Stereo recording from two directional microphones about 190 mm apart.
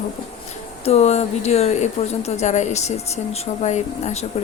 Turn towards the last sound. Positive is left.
turn(degrees=35)  # may be behind; listen again after turning